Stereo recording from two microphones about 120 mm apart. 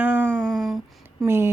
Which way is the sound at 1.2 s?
20° right (ahead or behind).